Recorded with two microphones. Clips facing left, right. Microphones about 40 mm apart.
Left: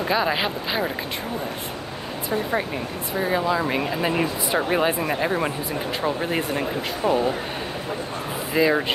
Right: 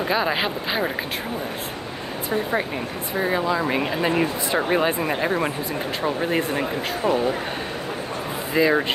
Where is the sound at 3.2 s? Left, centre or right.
Centre.